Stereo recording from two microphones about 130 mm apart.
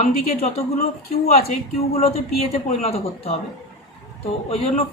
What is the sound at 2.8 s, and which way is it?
Speech, 50° left (ahead or behind).